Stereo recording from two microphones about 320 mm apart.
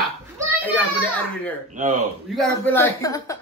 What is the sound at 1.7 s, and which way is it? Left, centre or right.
Speech, right.